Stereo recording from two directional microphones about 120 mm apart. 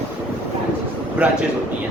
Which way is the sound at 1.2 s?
10° right (ahead or behind).